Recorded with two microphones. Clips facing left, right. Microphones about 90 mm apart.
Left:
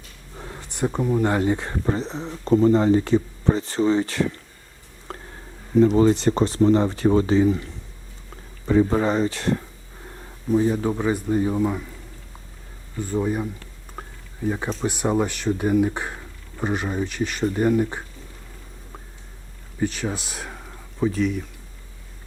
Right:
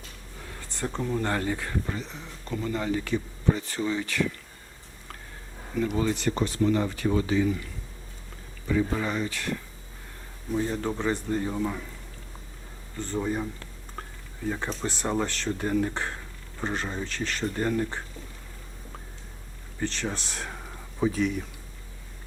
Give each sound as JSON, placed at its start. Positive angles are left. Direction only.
{"t": 0.3, "sound": "a sound", "side_deg": 30}
{"t": 0.6, "sound": "speech", "side_deg": 15}
{"t": 5.1, "sound": "a sound", "side_deg": 30}
{"t": 5.7, "sound": "speech", "side_deg": 30}
{"t": 10.6, "sound": "speech", "side_deg": 10}
{"t": 13.0, "sound": "speech", "side_deg": 10}
{"t": 14.0, "sound": "a sound", "side_deg": 10}
{"t": 14.4, "sound": "speech", "side_deg": 15}
{"t": 19.8, "sound": "speech", "side_deg": 5}